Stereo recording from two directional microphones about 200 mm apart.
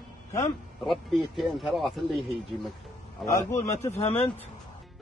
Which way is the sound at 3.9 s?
30° left (ahead or behind).